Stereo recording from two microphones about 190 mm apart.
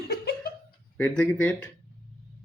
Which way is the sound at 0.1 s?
60° left (ahead or behind).